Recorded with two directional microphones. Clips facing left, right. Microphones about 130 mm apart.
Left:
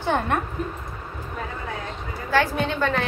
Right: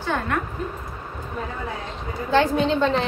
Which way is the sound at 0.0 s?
20° left (ahead or behind).